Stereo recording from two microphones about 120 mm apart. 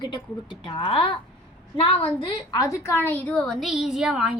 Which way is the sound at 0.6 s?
45° left (ahead or behind).